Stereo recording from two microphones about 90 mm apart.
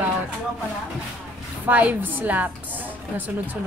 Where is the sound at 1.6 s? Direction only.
20° right (ahead or behind).